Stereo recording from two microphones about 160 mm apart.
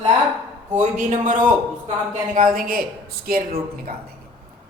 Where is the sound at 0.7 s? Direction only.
50° right (ahead or behind).